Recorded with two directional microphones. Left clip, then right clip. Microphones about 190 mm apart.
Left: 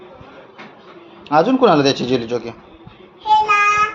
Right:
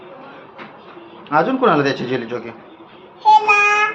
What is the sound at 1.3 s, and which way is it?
A man's voice, 40° left (ahead or behind).